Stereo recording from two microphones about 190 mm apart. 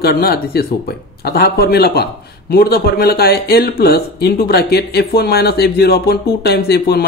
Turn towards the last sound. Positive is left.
turn(degrees=55)  # may be behind; listen again after turning